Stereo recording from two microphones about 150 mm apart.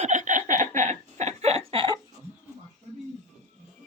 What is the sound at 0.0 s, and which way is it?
Laughter, 55° right (ahead or behind).